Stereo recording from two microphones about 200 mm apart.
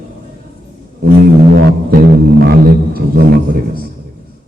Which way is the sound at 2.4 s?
50° right (ahead or behind).